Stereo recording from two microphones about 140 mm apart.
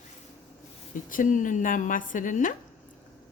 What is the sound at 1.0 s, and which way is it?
A woman's voice, 70° left (ahead or behind).